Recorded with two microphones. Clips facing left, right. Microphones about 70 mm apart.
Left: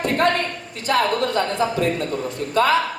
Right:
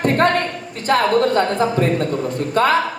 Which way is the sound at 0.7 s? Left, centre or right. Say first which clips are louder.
Right 4 dB; right.